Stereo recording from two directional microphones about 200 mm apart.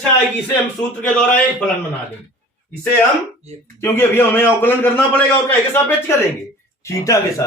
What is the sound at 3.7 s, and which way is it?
A man's voice, 10° left (ahead or behind).